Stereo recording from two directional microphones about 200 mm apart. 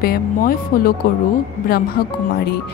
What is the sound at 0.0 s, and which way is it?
Speech, 50° left (ahead or behind).